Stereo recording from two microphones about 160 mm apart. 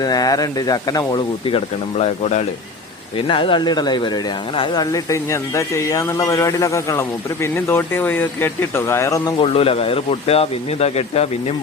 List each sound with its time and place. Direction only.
0.0 s speech: 25° left (ahead or behind)
9.4 s speech: 35° left (ahead or behind)